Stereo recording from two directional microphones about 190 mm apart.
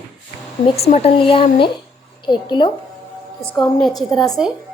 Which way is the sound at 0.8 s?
35° left (ahead or behind).